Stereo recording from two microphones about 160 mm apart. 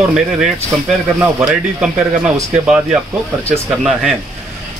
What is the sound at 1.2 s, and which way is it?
Speech, 10° right (ahead or behind).